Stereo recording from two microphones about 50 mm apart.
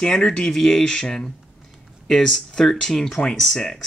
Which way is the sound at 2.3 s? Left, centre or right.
Centre.